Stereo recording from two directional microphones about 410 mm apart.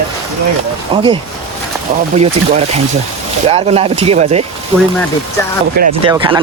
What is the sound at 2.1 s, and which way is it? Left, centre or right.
Speech, centre.